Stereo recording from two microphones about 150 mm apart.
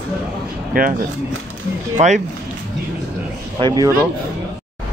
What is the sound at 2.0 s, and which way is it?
Speech, 50° right (ahead or behind).